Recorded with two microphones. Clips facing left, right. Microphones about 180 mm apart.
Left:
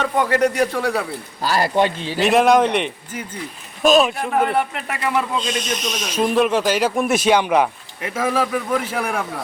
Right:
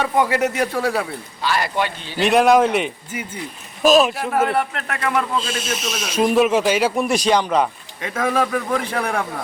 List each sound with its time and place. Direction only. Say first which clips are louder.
0.0 s a man's voice: left 1 dB; 10° right (ahead or behind)
1.4 s speech: left 4 dB; 40° left (ahead or behind)
2.1 s a man's voice: right 1 dB; centre (ahead or behind)